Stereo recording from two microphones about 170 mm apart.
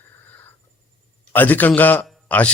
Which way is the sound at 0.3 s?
10° left (ahead or behind).